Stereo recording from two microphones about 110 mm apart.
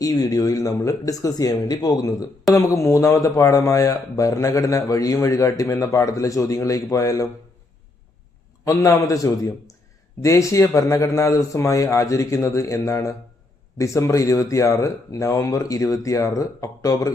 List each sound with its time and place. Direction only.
0.0 s speech: 35° left (ahead or behind)
8.6 s speech: 30° left (ahead or behind)